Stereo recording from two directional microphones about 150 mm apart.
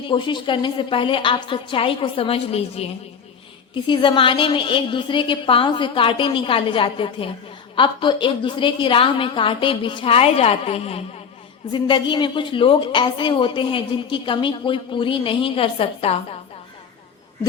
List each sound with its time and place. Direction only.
0.1 s a woman's voice: 30° left (ahead or behind)
3.8 s a woman's voice: 30° left (ahead or behind)
11.7 s a woman's voice: 30° left (ahead or behind)